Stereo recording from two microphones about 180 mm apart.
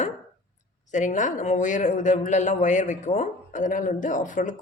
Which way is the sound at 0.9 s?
45° left (ahead or behind).